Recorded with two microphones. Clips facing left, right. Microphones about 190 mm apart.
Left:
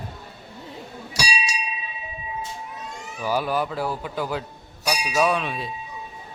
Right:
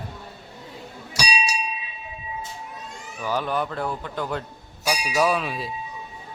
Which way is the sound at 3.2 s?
10° left (ahead or behind).